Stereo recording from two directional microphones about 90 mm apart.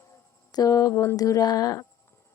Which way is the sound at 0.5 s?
40° left (ahead or behind).